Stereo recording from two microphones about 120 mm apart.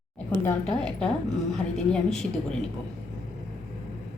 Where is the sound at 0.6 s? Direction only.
5° left (ahead or behind).